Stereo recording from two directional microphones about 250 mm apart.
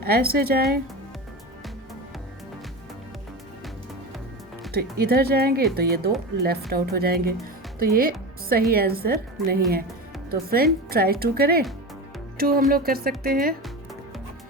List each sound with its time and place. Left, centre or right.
0.0 s a woman's voice: right
4.7 s a woman's voice: right